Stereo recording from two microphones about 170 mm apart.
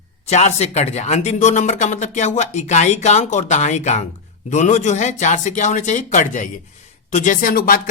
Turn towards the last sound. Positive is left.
turn(degrees=55)  # may be behind; listen again after turning